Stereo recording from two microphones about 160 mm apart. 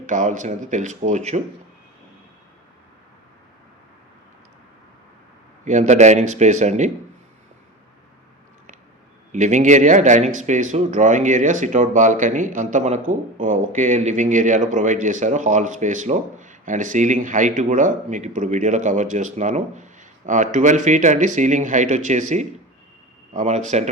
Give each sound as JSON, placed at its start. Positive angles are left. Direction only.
{"t": 0.0, "sound": "speech", "side_deg": -50}
{"t": 5.6, "sound": "speech", "side_deg": -50}
{"t": 9.3, "sound": "speech", "side_deg": -50}